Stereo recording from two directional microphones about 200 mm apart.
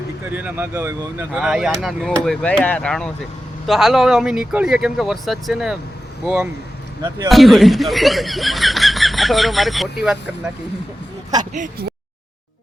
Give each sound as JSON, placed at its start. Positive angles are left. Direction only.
{"t": 0.3, "sound": "speech", "side_deg": -10}
{"t": 11.5, "sound": "speech", "side_deg": -40}